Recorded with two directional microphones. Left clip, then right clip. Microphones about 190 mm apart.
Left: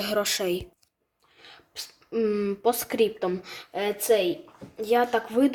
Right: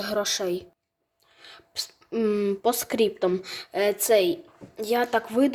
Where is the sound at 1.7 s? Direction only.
30° right (ahead or behind).